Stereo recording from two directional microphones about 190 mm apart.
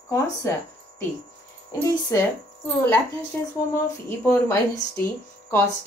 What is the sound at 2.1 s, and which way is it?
Speech, 15° left (ahead or behind).